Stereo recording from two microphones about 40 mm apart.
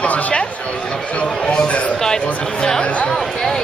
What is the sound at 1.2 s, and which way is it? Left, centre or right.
Speech, centre.